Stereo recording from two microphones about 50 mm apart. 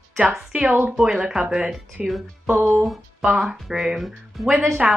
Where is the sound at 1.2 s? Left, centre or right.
Centre.